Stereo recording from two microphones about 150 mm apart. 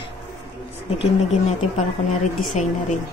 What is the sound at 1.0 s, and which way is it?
Speech, 45° left (ahead or behind).